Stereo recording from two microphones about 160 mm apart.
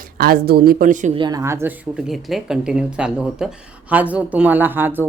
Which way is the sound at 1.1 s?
25° right (ahead or behind).